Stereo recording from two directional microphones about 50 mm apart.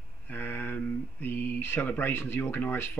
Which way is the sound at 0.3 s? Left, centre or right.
Left.